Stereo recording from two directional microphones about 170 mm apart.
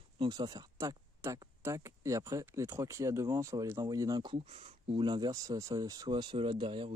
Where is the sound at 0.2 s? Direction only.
25° right (ahead or behind).